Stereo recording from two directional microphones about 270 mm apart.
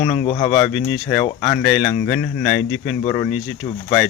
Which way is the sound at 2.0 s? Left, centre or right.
Centre.